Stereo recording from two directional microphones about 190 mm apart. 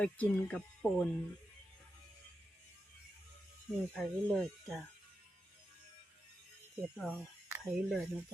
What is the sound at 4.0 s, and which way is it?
Speech, centre (ahead or behind).